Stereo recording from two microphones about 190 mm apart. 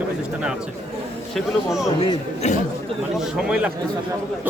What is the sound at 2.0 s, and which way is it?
Speech, 35° left (ahead or behind).